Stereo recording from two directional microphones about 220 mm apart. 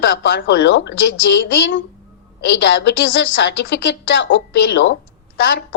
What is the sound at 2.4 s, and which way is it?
A woman's voice, 55° left (ahead or behind).